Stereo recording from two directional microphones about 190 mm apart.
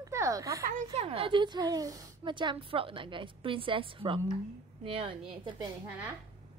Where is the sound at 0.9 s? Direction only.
30° right (ahead or behind).